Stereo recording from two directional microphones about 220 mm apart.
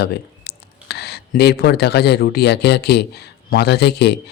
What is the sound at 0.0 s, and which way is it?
Speech, 45° left (ahead or behind).